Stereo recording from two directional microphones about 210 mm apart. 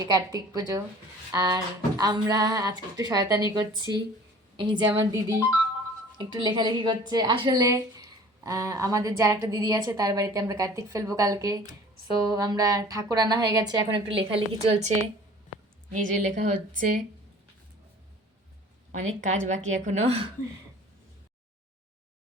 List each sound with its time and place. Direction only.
0.0 s a woman's voice: 15° right (ahead or behind); by 16.6 s 40° right (ahead or behind)
18.9 s a woman's voice: 35° right (ahead or behind)